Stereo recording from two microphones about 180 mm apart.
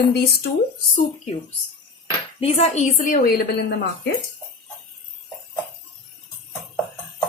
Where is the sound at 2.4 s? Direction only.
35° left (ahead or behind); by 3.8 s 60° left (ahead or behind).